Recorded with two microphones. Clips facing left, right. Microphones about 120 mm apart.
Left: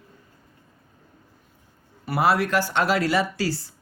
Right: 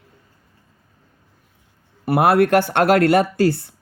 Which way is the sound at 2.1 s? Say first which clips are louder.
Right 7 dB; 55° right (ahead or behind).